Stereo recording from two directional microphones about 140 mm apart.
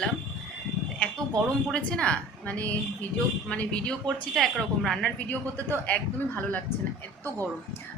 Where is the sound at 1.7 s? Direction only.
10° left (ahead or behind).